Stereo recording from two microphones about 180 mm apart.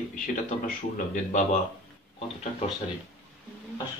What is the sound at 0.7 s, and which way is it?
Speech, 45° left (ahead or behind).